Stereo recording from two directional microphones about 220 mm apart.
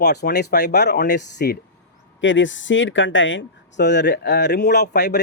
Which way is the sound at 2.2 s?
60° left (ahead or behind).